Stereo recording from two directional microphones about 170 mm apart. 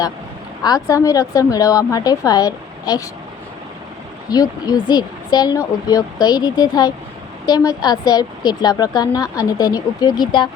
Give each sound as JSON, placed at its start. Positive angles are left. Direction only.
{"t": 0.6, "sound": "a woman's voice", "side_deg": 20}
{"t": 4.3, "sound": "a woman's voice", "side_deg": 20}